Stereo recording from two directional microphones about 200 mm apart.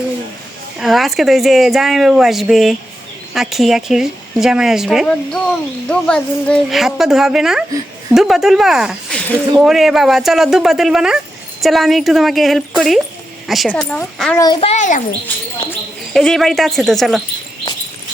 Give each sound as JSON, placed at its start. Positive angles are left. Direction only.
{"t": 0.8, "sound": "speech", "side_deg": 0}
{"t": 14.3, "sound": "a child's voice", "side_deg": 20}
{"t": 14.7, "sound": "a child's voice", "side_deg": 40}
{"t": 15.7, "sound": "speech", "side_deg": 5}